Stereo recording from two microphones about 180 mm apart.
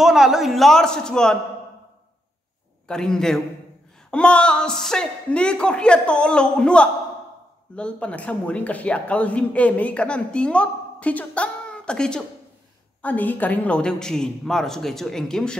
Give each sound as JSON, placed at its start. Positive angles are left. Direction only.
{"t": 0.0, "sound": "speech", "side_deg": 0}
{"t": 2.9, "sound": "speech", "side_deg": 5}